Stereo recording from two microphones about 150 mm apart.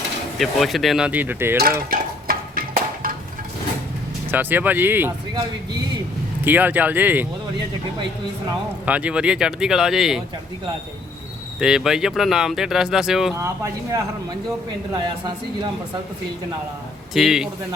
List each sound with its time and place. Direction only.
0.3 s speech: centre (ahead or behind)
1.9 s a sound: 75° right (ahead or behind)
4.3 s speech: 10° right (ahead or behind)
6.4 s speech: 10° right (ahead or behind)
8.9 s speech: 10° right (ahead or behind)
11.6 s speech: 5° right (ahead or behind)
13.3 s speech: 20° right (ahead or behind)
17.2 s speech: 5° right (ahead or behind)